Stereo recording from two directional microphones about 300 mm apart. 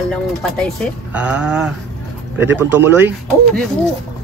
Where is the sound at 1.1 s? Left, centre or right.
Centre.